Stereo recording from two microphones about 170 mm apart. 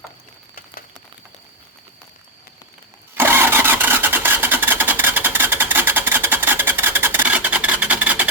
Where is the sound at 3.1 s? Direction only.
15° right (ahead or behind).